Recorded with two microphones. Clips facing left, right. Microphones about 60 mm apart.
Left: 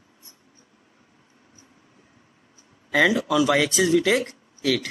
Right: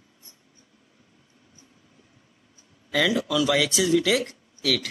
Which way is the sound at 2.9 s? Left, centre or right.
Left.